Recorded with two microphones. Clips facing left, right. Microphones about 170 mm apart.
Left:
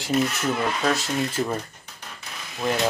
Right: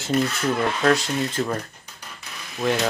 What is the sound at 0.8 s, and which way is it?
Speech, 5° left (ahead or behind).